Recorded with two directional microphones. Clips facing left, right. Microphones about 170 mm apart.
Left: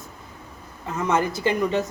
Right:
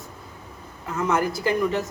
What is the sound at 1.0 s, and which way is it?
Speech, 20° left (ahead or behind).